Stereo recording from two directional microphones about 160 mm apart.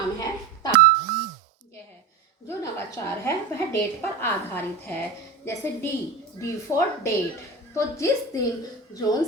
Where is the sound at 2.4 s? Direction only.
15° left (ahead or behind).